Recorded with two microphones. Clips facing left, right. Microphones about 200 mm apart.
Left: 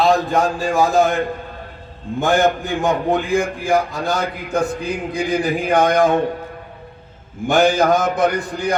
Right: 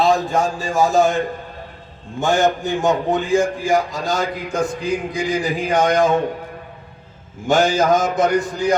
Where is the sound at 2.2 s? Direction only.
55° left (ahead or behind).